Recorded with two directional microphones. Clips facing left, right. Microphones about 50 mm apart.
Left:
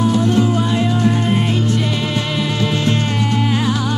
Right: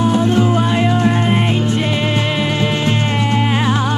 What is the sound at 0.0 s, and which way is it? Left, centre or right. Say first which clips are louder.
Music: right 1 dB; right.